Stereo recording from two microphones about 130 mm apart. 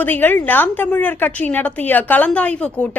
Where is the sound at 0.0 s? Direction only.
15° left (ahead or behind).